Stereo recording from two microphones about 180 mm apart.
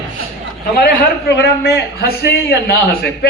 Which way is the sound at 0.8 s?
65° left (ahead or behind).